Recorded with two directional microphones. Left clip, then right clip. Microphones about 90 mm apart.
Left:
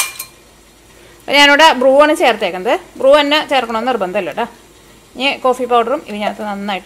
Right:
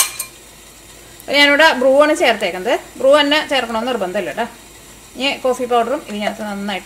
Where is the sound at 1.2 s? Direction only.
45° left (ahead or behind).